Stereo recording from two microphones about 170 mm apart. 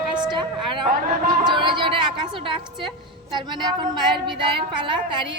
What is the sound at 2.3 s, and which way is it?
A woman's voice, 30° right (ahead or behind).